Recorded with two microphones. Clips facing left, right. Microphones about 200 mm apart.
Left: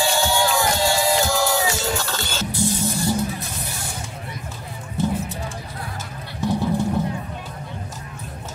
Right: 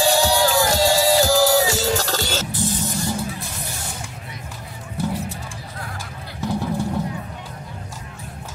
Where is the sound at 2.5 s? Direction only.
15° left (ahead or behind).